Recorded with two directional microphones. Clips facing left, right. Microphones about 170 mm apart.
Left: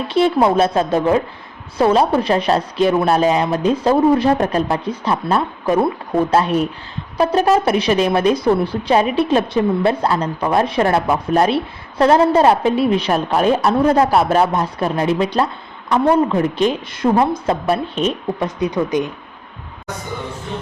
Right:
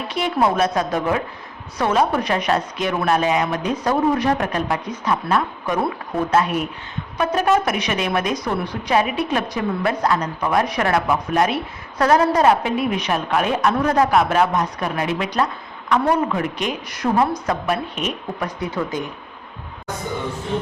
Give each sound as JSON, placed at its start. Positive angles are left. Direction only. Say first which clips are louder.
{"t": 0.1, "sound": "a woman's voice", "louder": "left 6 dB", "side_deg": 30}